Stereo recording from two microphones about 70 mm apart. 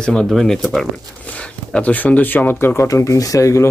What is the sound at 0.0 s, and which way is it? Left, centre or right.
Speech, centre.